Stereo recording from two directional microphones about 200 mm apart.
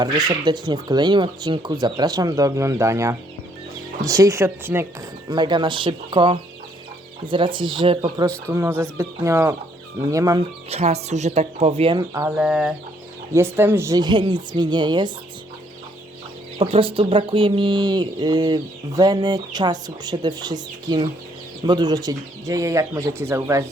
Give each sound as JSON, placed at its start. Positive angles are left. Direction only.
{"t": 0.3, "sound": "speech", "side_deg": -20}
{"t": 5.3, "sound": "speech", "side_deg": -20}
{"t": 8.4, "sound": "speech", "side_deg": -10}
{"t": 10.7, "sound": "speech", "side_deg": -30}
{"t": 12.4, "sound": "chicken", "side_deg": -5}
{"t": 13.3, "sound": "speech", "side_deg": -10}
{"t": 16.6, "sound": "speech", "side_deg": -25}